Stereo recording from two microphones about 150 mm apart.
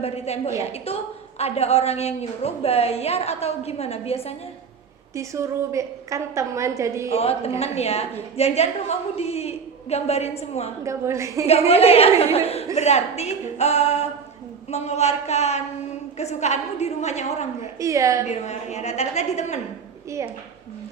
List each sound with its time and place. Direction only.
0.0 s a woman's voice: 45° left (ahead or behind)
5.1 s a woman's voice: 20° right (ahead or behind)
7.1 s a woman's voice: 40° left (ahead or behind)
10.8 s a woman's voice: 20° right (ahead or behind)
11.4 s a woman's voice: 45° left (ahead or behind)
17.7 s a woman's voice: 20° right (ahead or behind)
18.3 s a woman's voice: 50° left (ahead or behind)
20.1 s a woman's voice: 20° right (ahead or behind)